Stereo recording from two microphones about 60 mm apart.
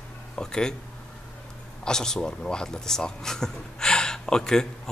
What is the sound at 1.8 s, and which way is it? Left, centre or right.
A man's voice, centre.